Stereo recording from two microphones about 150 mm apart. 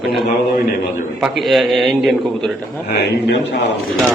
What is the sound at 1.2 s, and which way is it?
A man's voice, centre (ahead or behind).